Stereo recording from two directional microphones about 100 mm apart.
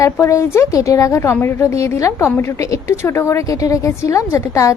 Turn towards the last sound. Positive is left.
turn(degrees=30)  # may be behind; listen again after turning